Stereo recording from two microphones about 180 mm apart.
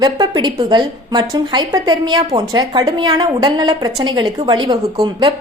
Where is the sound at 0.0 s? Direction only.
25° right (ahead or behind).